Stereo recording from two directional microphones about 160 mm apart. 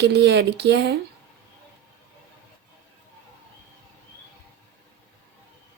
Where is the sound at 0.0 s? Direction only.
90° right.